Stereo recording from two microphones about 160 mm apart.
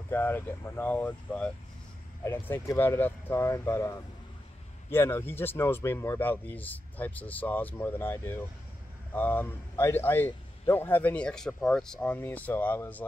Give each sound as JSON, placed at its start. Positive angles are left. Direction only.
{"t": 0.1, "sound": "speech", "side_deg": 15}